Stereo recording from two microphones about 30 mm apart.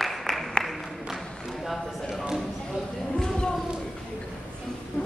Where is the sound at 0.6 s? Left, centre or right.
Centre.